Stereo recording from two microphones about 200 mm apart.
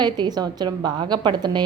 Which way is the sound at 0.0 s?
20° right (ahead or behind).